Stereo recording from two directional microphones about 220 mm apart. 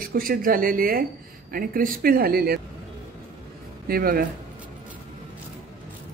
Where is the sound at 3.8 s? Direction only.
40° right (ahead or behind).